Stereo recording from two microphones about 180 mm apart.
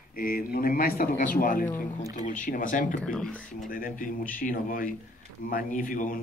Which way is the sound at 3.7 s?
50° left (ahead or behind).